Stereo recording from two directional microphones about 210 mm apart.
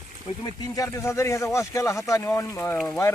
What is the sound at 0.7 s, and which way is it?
Speech, 15° left (ahead or behind).